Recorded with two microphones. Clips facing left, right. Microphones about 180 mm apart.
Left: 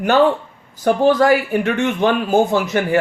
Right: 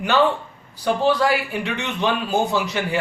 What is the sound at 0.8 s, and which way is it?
A man's voice, 45° left (ahead or behind).